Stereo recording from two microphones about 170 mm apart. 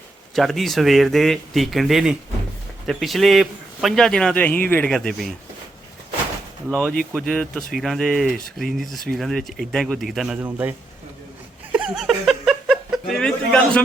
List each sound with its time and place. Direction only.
0.3 s a man's voice: centre (ahead or behind)
6.7 s a man's voice: 5° left (ahead or behind)
11.7 s a sound: 5° right (ahead or behind)